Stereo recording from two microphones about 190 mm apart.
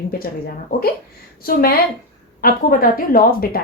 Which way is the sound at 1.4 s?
50° left (ahead or behind).